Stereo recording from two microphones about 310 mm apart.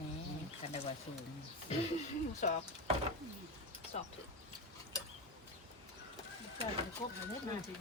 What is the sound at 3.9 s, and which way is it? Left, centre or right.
Speech, left.